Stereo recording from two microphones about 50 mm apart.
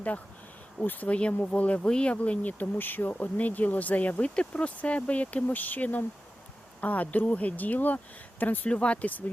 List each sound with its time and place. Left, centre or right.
0.9 s speech: left